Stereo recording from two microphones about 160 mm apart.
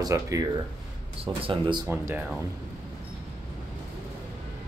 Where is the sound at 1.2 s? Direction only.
35° right (ahead or behind).